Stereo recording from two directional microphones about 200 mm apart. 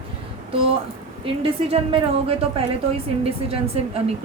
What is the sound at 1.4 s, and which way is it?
Speech, 30° right (ahead or behind).